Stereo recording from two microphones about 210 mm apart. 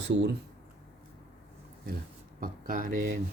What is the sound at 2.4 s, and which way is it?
Speech, 40° right (ahead or behind).